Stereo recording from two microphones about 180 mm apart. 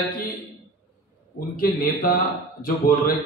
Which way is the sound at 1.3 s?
50° left (ahead or behind).